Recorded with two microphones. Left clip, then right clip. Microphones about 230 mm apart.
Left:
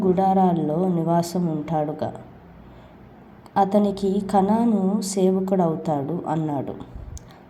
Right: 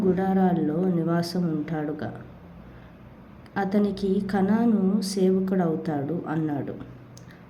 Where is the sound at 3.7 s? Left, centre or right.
Centre.